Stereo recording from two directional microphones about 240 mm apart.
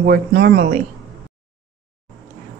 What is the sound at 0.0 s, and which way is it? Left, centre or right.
Speech, right.